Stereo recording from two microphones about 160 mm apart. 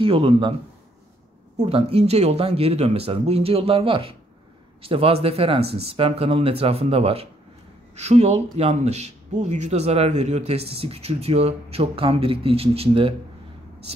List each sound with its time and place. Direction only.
0.0 s speech: 35° right (ahead or behind)
1.6 s speech: 40° right (ahead or behind)